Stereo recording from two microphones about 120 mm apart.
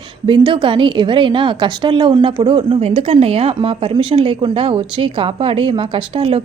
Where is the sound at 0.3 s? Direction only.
45° right (ahead or behind).